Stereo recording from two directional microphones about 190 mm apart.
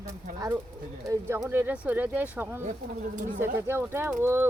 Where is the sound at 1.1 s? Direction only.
15° right (ahead or behind).